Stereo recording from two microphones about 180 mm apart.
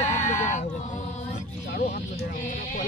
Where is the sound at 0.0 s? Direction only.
40° left (ahead or behind).